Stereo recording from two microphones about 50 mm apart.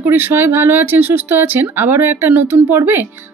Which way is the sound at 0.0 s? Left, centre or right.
Right.